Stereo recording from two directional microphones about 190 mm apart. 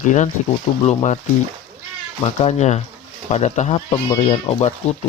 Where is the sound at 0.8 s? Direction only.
40° left (ahead or behind).